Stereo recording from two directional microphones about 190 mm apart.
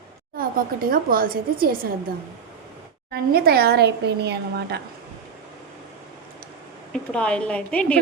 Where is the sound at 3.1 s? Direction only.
55° right (ahead or behind).